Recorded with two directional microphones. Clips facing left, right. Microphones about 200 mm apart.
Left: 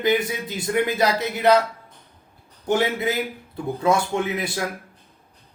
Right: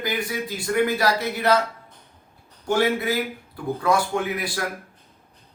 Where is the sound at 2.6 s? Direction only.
20° left (ahead or behind).